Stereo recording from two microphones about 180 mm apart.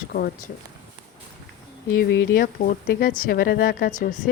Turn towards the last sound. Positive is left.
turn(degrees=55)  # may be behind; listen again after turning